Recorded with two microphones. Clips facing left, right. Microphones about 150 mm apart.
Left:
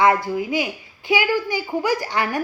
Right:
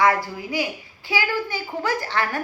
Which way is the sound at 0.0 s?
20° left (ahead or behind).